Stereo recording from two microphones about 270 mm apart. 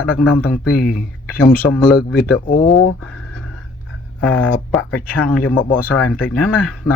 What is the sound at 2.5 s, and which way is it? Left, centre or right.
Speech, centre.